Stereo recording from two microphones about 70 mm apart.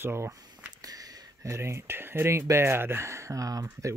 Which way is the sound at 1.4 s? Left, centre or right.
Right.